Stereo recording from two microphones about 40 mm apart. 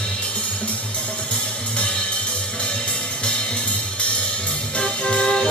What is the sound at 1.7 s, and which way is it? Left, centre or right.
Music, left.